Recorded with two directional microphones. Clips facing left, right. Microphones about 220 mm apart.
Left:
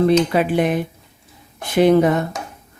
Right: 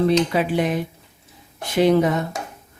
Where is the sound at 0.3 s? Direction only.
55° left (ahead or behind).